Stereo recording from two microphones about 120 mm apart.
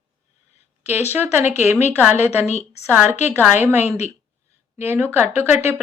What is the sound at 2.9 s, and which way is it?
Speech, 15° right (ahead or behind).